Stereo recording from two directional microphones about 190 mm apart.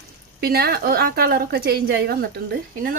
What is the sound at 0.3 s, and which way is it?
A woman's voice, 55° right (ahead or behind).